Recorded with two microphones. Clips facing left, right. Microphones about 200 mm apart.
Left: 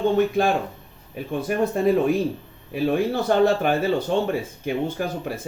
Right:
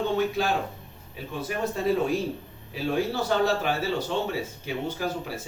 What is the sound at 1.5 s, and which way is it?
Speech, 55° left (ahead or behind).